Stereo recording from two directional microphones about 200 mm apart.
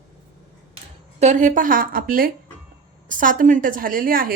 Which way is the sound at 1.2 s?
35° right (ahead or behind).